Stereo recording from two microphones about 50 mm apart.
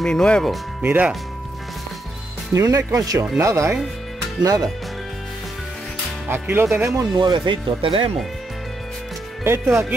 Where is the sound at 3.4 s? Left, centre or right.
Right.